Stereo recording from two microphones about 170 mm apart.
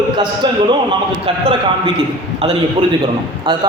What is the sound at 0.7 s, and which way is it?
Speech, 30° right (ahead or behind).